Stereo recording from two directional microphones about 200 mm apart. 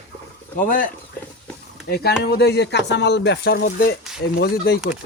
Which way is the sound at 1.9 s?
50° left (ahead or behind).